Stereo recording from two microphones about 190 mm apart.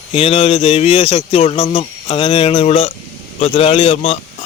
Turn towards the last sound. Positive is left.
turn(degrees=30)  # may be behind; listen again after turning